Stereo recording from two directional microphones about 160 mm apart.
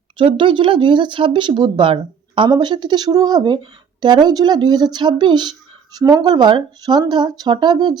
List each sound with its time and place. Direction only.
0.2 s speech: 30° right (ahead or behind)